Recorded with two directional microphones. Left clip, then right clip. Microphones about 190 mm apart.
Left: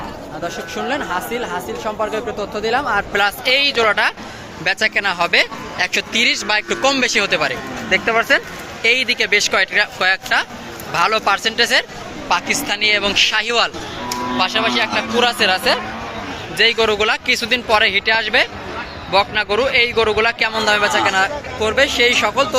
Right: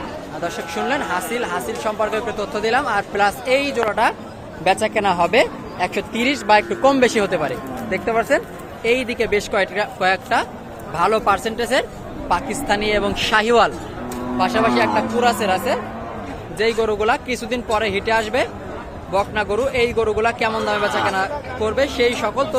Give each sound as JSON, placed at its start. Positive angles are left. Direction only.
{"t": 0.4, "sound": "a man's voice", "side_deg": -5}
{"t": 14.3, "sound": "a man's voice", "side_deg": -15}